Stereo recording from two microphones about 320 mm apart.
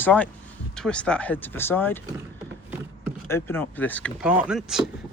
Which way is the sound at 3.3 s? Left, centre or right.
Centre.